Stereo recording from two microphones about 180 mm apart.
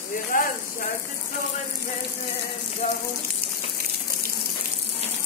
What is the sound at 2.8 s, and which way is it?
Water, 35° left (ahead or behind).